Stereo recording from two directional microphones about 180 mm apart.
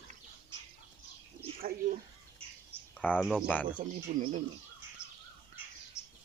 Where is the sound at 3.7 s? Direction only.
45° right (ahead or behind).